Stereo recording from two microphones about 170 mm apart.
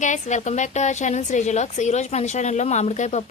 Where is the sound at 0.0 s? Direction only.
45° left (ahead or behind).